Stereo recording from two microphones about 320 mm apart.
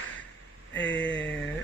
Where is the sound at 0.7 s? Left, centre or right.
Left.